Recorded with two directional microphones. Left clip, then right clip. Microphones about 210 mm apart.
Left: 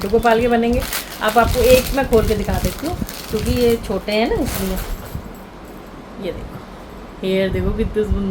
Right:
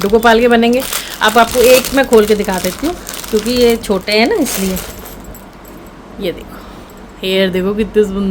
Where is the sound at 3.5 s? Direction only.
55° right (ahead or behind).